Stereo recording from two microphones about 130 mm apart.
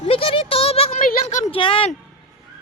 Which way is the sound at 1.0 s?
65° left (ahead or behind).